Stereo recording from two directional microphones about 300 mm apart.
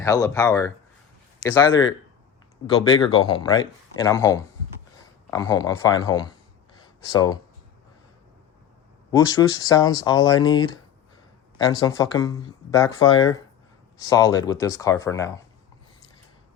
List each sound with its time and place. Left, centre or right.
0.0 s speech: centre
3.2 s speech: centre
6.8 s a sound: centre
9.1 s speech: centre